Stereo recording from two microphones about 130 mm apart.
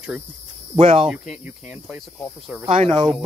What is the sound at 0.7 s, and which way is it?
Speech, 45° right (ahead or behind).